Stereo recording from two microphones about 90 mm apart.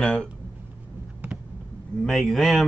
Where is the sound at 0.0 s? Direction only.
10° left (ahead or behind).